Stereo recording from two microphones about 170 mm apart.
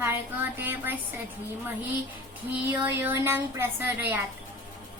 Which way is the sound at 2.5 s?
10° right (ahead or behind).